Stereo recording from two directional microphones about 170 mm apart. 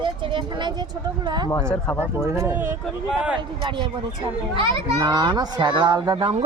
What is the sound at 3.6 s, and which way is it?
A child's voice, 30° right (ahead or behind).